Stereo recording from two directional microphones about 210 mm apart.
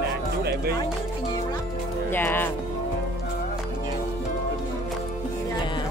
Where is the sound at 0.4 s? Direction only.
50° right (ahead or behind).